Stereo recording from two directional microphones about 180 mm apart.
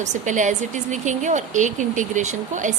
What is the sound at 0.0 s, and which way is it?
A woman's voice, 40° right (ahead or behind).